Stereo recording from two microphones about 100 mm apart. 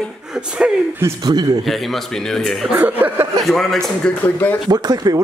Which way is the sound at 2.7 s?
15° right (ahead or behind).